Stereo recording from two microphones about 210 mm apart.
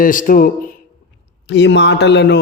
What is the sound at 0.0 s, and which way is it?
Speech, 40° left (ahead or behind).